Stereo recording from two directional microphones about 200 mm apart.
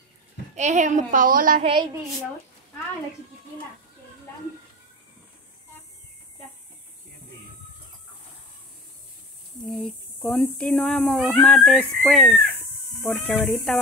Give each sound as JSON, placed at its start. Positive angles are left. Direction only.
{"t": 0.6, "sound": "a woman's voice", "side_deg": -35}
{"t": 1.6, "sound": "a woman's voice", "side_deg": -25}
{"t": 9.7, "sound": "speech", "side_deg": 0}